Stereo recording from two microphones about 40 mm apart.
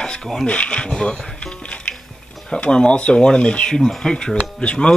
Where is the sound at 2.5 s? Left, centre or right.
Left.